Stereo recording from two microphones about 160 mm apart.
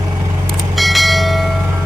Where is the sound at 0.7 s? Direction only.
Centre (ahead or behind).